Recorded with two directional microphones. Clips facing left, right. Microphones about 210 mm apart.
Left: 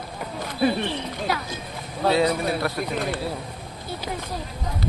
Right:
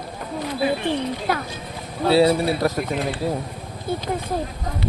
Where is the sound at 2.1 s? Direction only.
35° right (ahead or behind).